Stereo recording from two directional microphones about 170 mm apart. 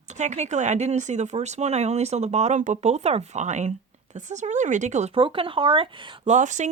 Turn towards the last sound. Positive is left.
turn(degrees=-45)  # may be behind; listen again after turning